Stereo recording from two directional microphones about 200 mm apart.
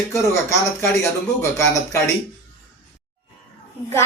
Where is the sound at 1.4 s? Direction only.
15° left (ahead or behind).